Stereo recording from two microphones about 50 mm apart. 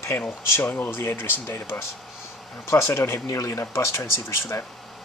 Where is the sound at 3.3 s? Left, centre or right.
Left.